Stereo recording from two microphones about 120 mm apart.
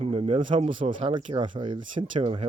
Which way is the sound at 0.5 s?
85° right.